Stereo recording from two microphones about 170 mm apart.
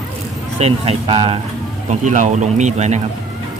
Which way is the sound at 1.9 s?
45° right (ahead or behind).